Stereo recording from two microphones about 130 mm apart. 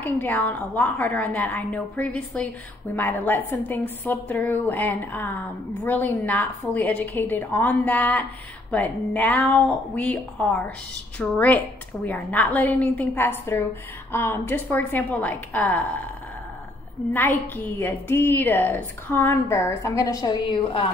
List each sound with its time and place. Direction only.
0.0 s a woman's voice: 15° left (ahead or behind)
17.1 s a woman's voice: 15° left (ahead or behind); by 20.8 s 40° left (ahead or behind)